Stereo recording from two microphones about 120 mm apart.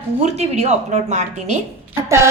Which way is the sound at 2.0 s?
20° right (ahead or behind).